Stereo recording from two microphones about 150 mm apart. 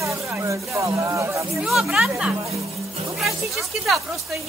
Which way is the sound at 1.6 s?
5° right (ahead or behind).